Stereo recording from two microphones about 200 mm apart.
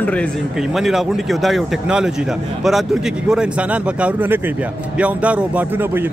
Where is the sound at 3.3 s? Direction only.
5° right (ahead or behind).